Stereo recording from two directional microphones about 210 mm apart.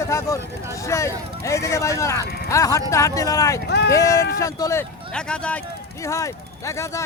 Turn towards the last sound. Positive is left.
turn(degrees=15)  # may be behind; listen again after turning